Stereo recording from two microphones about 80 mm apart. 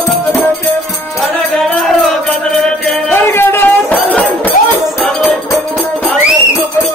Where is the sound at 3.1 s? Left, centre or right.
Left.